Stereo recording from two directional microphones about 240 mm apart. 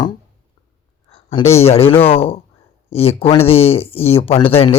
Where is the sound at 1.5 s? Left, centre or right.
Left.